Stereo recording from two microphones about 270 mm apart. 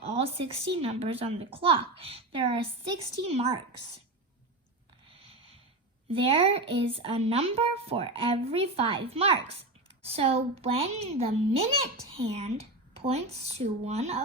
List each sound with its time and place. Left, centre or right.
0.0 s speech: right
6.3 s speech: right